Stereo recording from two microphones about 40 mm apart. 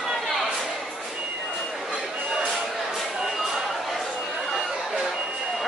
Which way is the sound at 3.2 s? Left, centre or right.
Centre.